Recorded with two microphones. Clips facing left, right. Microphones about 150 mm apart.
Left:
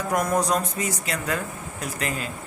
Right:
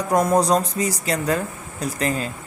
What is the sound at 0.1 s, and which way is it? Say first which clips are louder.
Speech: right 6 dB; 30° right (ahead or behind).